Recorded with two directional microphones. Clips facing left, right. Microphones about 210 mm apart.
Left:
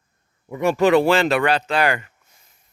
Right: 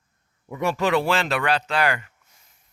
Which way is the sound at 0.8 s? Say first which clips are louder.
Left 7 dB; 50° left (ahead or behind).